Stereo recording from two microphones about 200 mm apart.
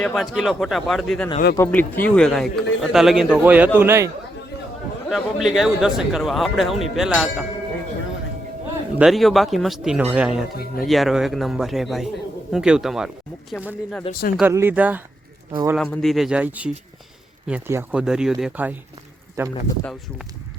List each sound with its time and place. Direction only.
0.0 s speech: centre (ahead or behind)
1.5 s speech: 10° left (ahead or behind); by 4.1 s 10° right (ahead or behind)
5.1 s speech: centre (ahead or behind)
9.0 s speech: centre (ahead or behind)
14.1 s speech: 45° left (ahead or behind)
14.5 s speech: 10° right (ahead or behind)
15.7 s speech: centre (ahead or behind); by 19.5 s 15° right (ahead or behind)
19.8 s speech: 5° left (ahead or behind)